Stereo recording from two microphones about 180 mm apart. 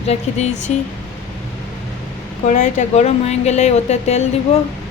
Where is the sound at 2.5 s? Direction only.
40° left (ahead or behind).